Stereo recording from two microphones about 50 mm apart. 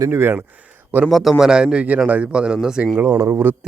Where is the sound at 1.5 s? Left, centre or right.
Centre.